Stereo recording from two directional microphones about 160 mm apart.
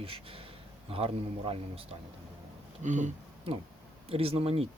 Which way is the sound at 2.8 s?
50° right (ahead or behind).